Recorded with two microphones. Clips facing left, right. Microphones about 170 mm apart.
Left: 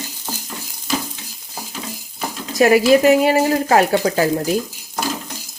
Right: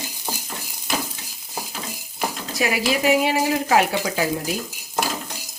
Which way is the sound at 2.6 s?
45° left (ahead or behind).